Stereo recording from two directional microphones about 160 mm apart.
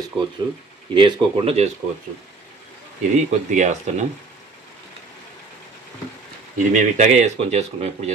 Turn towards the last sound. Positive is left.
turn(degrees=-45)  # may be behind; listen again after turning